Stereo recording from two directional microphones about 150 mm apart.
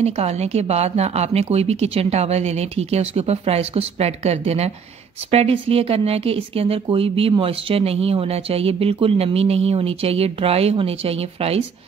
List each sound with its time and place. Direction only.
0.0 s speech: 45° right (ahead or behind)